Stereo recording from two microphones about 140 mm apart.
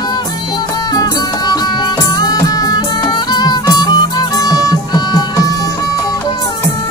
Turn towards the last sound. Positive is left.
turn(degrees=25)  # may be behind; listen again after turning